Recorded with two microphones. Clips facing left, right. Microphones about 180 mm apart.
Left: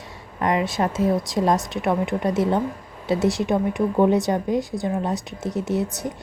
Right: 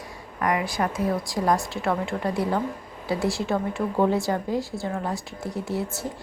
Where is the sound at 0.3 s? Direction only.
25° left (ahead or behind).